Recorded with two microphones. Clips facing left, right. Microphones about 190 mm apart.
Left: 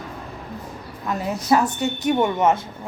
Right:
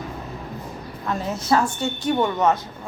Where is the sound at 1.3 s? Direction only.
15° left (ahead or behind).